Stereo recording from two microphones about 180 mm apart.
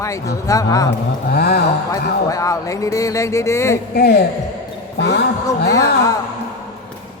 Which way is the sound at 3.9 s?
65° left (ahead or behind).